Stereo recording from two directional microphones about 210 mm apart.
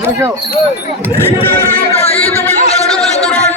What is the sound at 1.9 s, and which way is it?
Music, 30° left (ahead or behind).